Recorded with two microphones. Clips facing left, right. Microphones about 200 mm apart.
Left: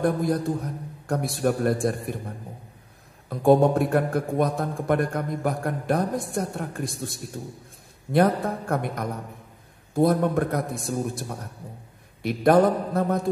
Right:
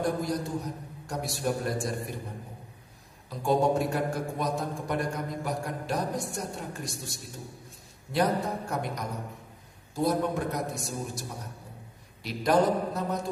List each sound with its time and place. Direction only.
0.0 s a man's voice: 55° left (ahead or behind)
3.3 s a man's voice: 55° left (ahead or behind)